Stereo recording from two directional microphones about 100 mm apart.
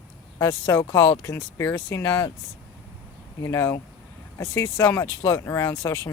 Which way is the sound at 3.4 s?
30° left (ahead or behind).